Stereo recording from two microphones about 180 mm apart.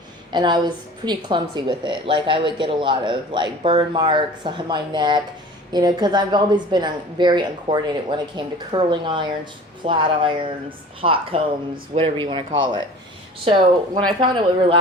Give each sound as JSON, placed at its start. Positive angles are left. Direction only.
{"t": 0.3, "sound": "speech", "side_deg": -25}